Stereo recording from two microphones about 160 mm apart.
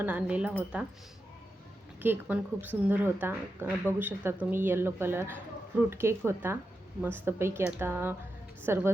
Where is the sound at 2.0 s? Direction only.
10° right (ahead or behind).